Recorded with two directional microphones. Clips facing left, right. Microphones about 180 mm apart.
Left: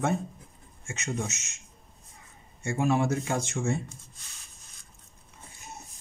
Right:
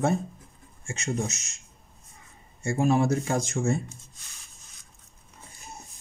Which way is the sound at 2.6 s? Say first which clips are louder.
Right 3 dB; 35° right (ahead or behind).